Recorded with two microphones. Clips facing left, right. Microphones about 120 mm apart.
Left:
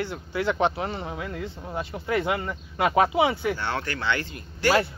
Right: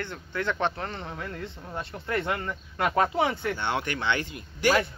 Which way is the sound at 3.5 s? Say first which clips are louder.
Even; 20° right (ahead or behind).